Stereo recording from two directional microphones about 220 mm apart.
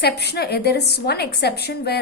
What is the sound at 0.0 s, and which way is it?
A woman's voice, 45° left (ahead or behind).